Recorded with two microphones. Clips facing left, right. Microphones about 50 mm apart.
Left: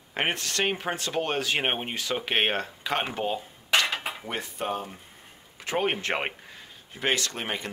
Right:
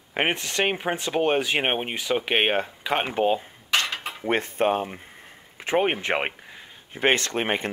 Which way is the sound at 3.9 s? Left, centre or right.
Centre.